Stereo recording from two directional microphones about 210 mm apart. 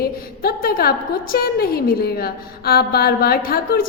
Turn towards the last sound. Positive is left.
turn(degrees=45)  # may be behind; listen again after turning